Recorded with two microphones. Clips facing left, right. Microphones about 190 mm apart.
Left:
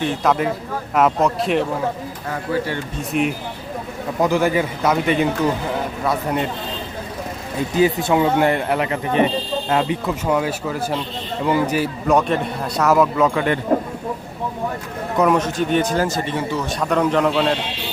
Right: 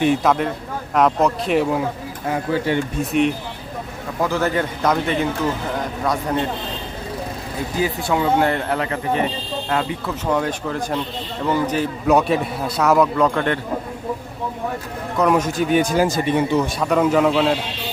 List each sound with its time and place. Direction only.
0.2 s a man's voice: centre (ahead or behind)
2.3 s speech: 20° right (ahead or behind)
3.1 s a man's voice: centre (ahead or behind)
4.2 s a man's voice: 15° left (ahead or behind)
7.8 s speech: 20° left (ahead or behind)
10.2 s speech: 5° left (ahead or behind)
12.0 s a man's voice: 5° right (ahead or behind)
15.4 s speech: 10° right (ahead or behind)
16.8 s a man's voice: 5° right (ahead or behind)